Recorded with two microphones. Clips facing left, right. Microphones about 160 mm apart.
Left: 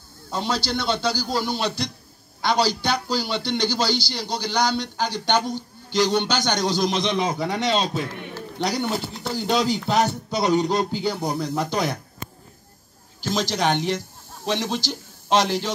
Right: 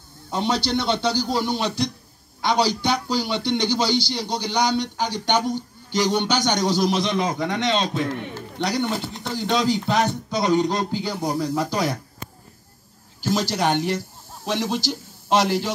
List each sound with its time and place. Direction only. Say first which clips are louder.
0.3 s a man's voice: right 3 dB; 20° right (ahead or behind); by 12.0 s centre (ahead or behind)
13.2 s a man's voice: right 1 dB; 10° right (ahead or behind)